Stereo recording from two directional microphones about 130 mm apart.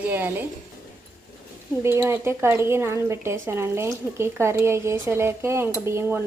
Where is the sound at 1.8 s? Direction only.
20° right (ahead or behind).